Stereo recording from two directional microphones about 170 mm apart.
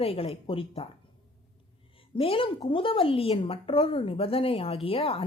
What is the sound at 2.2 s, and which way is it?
Speech, 35° left (ahead or behind).